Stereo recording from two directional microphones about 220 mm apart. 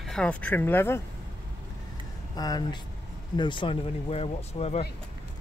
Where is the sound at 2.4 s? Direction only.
20° left (ahead or behind).